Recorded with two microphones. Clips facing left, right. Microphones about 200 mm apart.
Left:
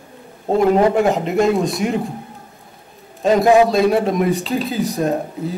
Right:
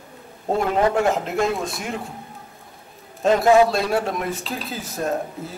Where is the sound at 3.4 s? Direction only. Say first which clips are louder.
Left 2 dB; 15° left (ahead or behind).